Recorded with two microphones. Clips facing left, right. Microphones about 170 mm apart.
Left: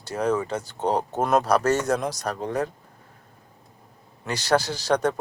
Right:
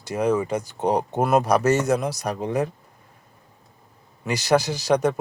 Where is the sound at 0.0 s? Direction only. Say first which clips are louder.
Right 2 dB; 10° right (ahead or behind).